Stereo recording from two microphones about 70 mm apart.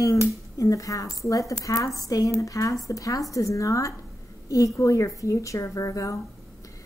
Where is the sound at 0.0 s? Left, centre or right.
Left.